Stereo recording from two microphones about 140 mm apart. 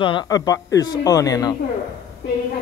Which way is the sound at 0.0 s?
30° left (ahead or behind).